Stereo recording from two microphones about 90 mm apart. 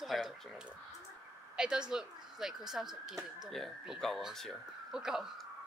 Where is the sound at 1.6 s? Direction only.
10° right (ahead or behind).